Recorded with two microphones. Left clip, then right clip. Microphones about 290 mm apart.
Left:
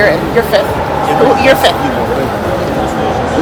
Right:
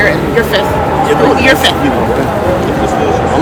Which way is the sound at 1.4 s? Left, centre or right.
Left.